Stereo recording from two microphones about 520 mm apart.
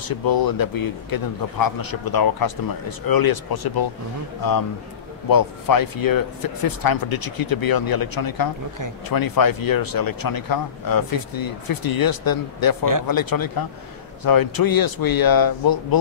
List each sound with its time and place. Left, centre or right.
0.0 s speech: left